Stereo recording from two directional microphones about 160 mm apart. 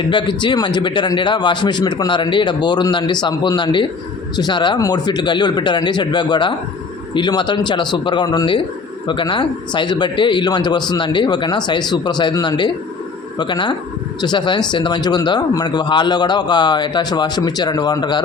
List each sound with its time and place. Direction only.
0.1 s speech: 30° left (ahead or behind)